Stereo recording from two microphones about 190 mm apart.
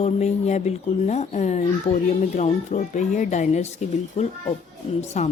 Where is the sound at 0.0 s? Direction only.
35° left (ahead or behind).